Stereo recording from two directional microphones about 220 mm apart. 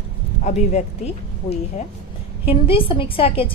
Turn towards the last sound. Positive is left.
turn(degrees=25)  # may be behind; listen again after turning